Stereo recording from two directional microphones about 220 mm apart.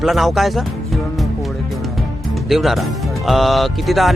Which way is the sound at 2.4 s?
Centre (ahead or behind).